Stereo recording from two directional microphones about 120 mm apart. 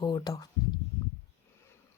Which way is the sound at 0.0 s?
35° left (ahead or behind).